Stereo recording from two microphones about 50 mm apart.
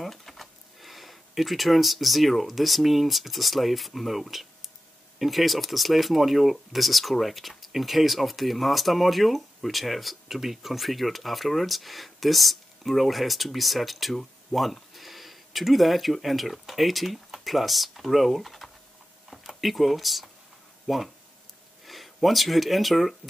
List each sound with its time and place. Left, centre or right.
0.0 s speech: centre